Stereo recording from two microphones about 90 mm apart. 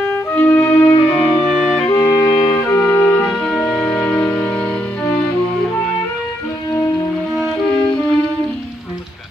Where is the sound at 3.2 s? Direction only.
5° left (ahead or behind).